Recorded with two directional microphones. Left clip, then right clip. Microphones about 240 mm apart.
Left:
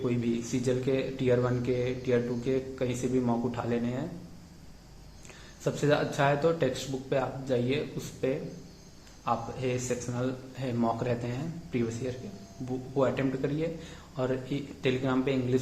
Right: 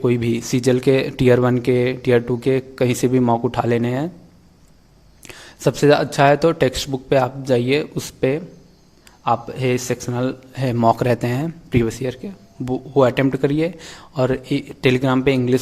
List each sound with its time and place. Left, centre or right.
0.0 s speech: right
5.6 s speech: right